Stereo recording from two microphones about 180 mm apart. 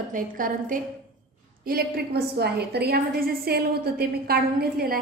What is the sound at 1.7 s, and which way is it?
A woman's voice, 60° right (ahead or behind).